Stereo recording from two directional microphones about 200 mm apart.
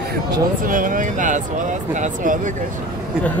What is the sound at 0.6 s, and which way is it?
Speech, 40° right (ahead or behind).